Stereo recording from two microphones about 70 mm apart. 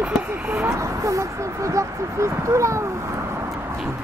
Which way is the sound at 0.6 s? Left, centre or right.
Right.